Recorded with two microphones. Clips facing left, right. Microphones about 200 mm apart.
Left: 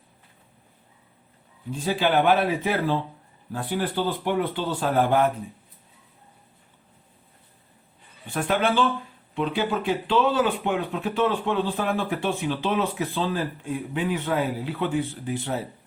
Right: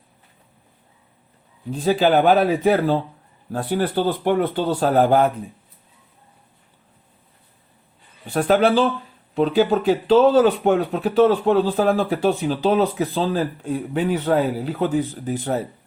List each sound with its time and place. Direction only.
1.7 s speech: 40° right (ahead or behind)
8.3 s speech: 40° right (ahead or behind)